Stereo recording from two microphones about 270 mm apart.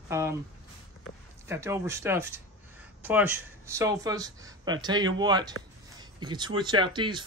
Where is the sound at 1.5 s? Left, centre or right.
Centre.